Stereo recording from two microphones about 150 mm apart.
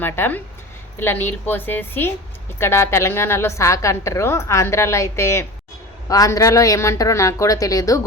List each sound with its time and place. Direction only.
0.0 s a woman's voice: 15° left (ahead or behind)